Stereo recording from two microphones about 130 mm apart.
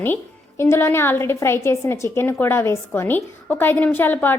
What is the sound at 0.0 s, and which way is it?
A woman's voice, 15° left (ahead or behind).